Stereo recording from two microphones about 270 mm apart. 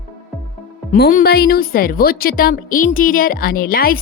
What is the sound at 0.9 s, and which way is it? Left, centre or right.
Speech, left.